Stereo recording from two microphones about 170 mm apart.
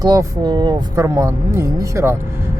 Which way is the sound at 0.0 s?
20° right (ahead or behind).